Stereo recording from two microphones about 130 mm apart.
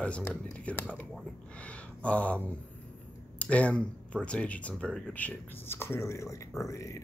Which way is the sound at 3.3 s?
10° left (ahead or behind).